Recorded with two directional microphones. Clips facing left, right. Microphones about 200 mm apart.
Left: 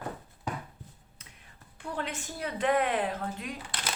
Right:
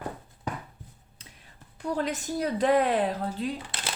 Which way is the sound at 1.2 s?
30° right (ahead or behind).